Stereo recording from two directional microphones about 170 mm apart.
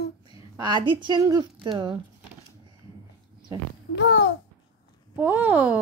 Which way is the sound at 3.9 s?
90° left.